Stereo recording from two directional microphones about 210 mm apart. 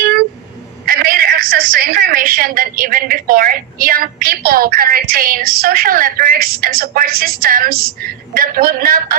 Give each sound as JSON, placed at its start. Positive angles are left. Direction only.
{"t": 0.9, "sound": "a woman's voice", "side_deg": -45}